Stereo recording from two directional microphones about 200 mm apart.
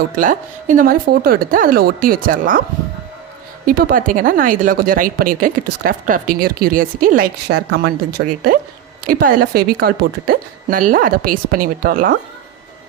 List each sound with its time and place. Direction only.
0.2 s speech: 40° right (ahead or behind)
3.7 s speech: 45° right (ahead or behind); by 8.3 s 60° right (ahead or behind)
9.0 s speech: 45° right (ahead or behind)